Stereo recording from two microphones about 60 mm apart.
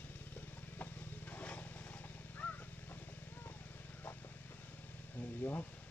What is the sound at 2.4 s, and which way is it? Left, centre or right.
Crow, left.